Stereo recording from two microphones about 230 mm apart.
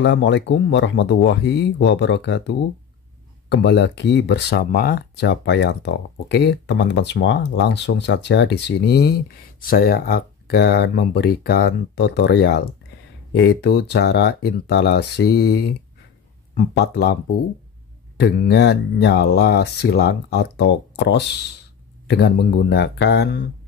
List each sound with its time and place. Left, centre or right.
0.0 s speech: left
18.2 s speech: left